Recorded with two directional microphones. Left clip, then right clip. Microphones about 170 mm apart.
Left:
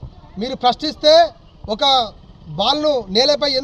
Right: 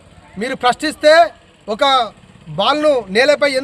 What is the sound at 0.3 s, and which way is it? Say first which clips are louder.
A man's voice: right 2 dB; 40° right (ahead or behind).